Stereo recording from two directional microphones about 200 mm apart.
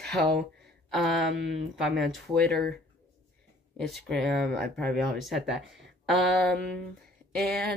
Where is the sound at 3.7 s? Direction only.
Centre (ahead or behind).